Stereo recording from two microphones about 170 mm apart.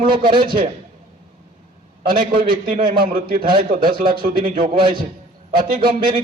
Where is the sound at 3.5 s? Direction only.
30° right (ahead or behind).